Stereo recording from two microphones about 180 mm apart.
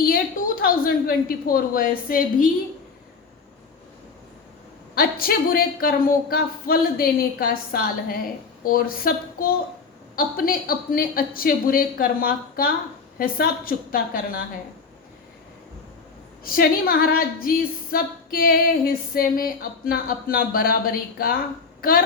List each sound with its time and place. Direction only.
0.0 s speech: 55° left (ahead or behind)
4.9 s a woman's voice: 55° left (ahead or behind)
16.4 s a woman's voice: 55° left (ahead or behind)